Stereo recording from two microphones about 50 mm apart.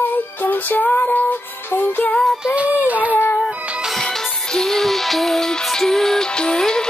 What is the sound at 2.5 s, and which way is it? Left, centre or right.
Music, right.